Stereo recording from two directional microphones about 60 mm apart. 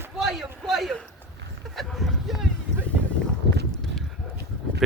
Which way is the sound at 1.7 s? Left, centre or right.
Centre.